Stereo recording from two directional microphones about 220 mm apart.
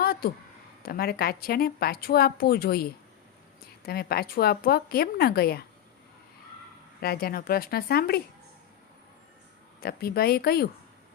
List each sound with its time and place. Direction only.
0.0 s a sound: 45° left (ahead or behind)
0.8 s a woman's voice: 45° left (ahead or behind)
7.0 s a woman's voice: 45° left (ahead or behind)
9.8 s a woman's voice: 45° left (ahead or behind)